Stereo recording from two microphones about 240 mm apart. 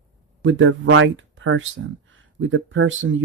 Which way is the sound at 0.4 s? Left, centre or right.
Right.